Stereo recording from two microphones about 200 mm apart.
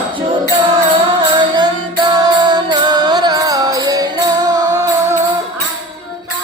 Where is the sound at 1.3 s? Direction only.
20° right (ahead or behind).